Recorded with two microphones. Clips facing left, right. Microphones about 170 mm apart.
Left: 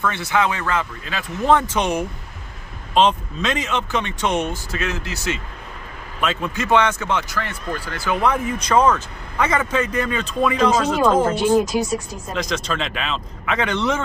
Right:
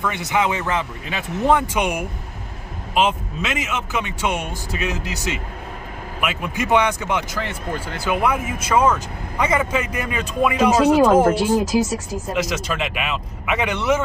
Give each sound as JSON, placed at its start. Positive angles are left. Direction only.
{"t": 0.0, "sound": "speech", "side_deg": -15}
{"t": 12.3, "sound": "speech", "side_deg": -10}